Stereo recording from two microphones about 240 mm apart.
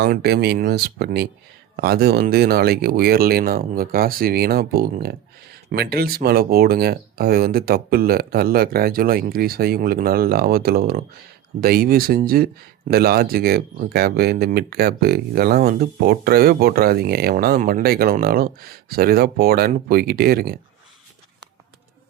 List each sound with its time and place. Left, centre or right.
0.0 s speech: right